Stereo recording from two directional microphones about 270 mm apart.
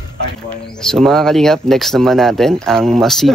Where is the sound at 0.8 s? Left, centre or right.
Centre.